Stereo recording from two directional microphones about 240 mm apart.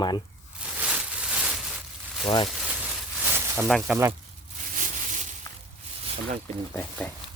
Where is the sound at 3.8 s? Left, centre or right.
Centre.